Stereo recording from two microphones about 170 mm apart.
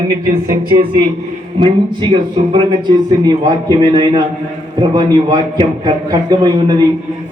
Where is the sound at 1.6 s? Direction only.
30° right (ahead or behind).